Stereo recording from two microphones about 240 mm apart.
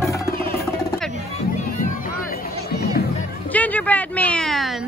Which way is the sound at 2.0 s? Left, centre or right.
Left.